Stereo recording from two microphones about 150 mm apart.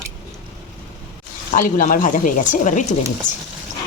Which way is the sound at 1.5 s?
65° left (ahead or behind).